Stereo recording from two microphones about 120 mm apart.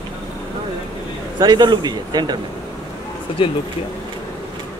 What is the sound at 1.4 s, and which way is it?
Speech, 35° right (ahead or behind).